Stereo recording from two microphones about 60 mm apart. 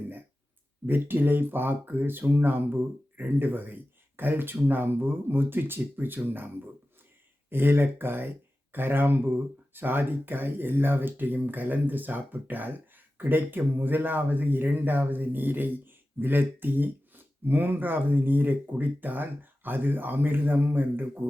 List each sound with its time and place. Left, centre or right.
0.9 s speech: right
7.5 s speech: right